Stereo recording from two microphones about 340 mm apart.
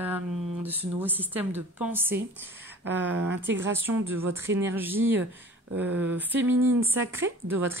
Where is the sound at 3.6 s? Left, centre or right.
Centre.